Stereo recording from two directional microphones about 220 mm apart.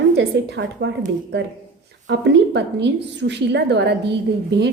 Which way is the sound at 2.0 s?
55° right (ahead or behind).